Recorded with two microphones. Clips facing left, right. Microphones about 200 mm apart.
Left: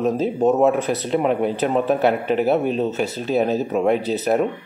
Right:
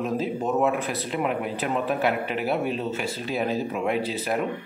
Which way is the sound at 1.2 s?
30° left (ahead or behind).